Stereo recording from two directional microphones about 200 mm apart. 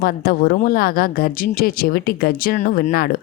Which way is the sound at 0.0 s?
45° left (ahead or behind).